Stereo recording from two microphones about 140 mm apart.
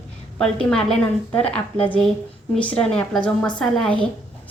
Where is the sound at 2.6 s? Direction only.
10° left (ahead or behind).